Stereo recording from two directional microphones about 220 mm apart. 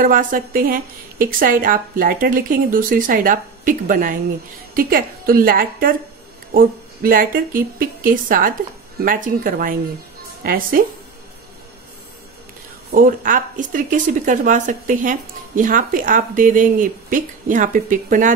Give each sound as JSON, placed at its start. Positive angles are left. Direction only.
{"t": 0.0, "sound": "a woman's voice", "side_deg": -40}
{"t": 12.9, "sound": "speech", "side_deg": -40}